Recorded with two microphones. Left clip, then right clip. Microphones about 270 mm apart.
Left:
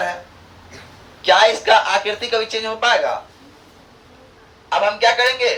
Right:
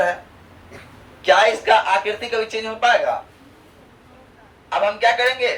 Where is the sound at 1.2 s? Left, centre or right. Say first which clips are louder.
Left 2 dB; centre.